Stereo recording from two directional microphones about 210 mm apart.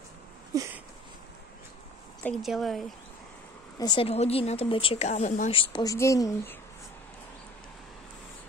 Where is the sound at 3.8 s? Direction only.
25° left (ahead or behind).